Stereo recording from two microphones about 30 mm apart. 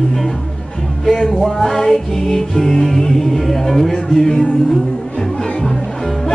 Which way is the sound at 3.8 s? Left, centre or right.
Left.